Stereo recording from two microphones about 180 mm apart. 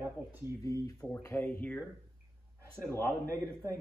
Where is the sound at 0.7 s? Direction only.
20° left (ahead or behind).